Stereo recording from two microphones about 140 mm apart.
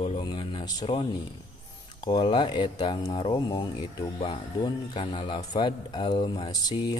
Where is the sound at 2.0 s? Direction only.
35° left (ahead or behind).